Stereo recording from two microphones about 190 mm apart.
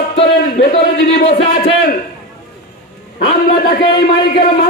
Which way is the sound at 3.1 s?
50° left (ahead or behind).